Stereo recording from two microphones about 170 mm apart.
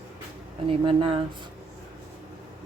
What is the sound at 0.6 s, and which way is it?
Speech, 35° right (ahead or behind).